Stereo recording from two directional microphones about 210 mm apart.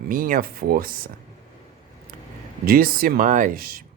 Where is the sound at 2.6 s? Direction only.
45° right (ahead or behind).